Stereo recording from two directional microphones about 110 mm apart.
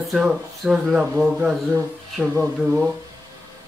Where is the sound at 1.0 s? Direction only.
10° right (ahead or behind).